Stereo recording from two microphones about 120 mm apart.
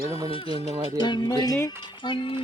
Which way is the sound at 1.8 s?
40° left (ahead or behind).